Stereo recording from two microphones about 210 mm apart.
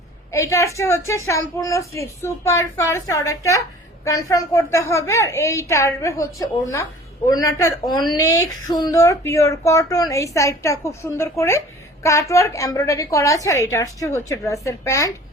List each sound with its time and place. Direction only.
0.3 s speech: 15° left (ahead or behind)